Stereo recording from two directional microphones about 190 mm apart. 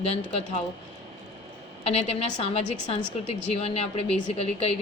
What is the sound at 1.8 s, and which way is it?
Speech, 35° left (ahead or behind).